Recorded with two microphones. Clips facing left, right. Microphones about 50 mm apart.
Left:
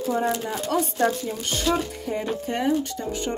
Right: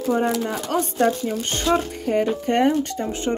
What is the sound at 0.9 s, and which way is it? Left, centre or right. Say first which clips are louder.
Music: right 3 dB; right.